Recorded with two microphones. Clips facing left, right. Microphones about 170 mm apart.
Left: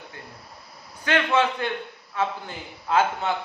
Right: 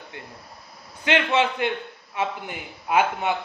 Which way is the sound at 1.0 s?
20° right (ahead or behind).